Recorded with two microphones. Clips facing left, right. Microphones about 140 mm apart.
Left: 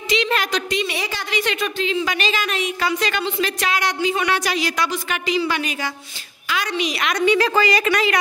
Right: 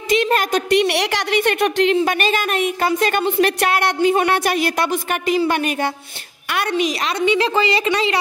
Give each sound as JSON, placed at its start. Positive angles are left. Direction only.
{"t": 0.1, "sound": "a woman's voice", "side_deg": -45}
{"t": 0.7, "sound": "speech", "side_deg": -70}
{"t": 7.1, "sound": "a woman's voice", "side_deg": -25}